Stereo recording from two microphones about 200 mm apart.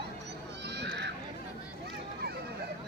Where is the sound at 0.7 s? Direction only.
60° right (ahead or behind).